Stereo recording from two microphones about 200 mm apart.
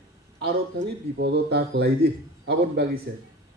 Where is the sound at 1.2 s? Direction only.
55° right (ahead or behind).